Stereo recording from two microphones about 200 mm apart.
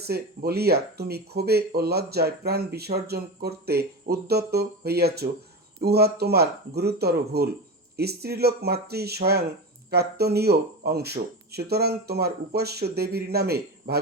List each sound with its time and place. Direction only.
0.0 s speech: 50° right (ahead or behind)